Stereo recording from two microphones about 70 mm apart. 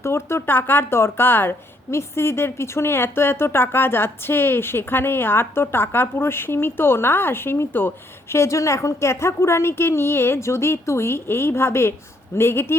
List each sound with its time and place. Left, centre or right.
0.0 s speech: left